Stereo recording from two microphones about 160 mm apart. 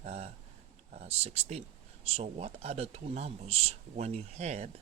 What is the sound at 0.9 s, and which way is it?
Speech, 40° right (ahead or behind).